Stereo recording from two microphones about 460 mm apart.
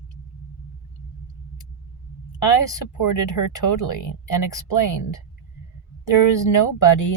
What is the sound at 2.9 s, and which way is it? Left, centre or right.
Speech, left.